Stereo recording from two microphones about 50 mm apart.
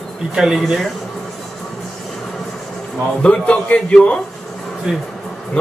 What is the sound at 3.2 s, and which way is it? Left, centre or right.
A man's voice, centre.